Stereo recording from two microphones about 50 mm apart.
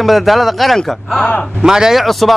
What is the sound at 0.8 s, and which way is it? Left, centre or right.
Speech, centre.